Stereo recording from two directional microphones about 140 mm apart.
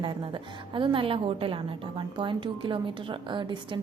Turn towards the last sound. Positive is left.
turn(degrees=-35)  # may be behind; listen again after turning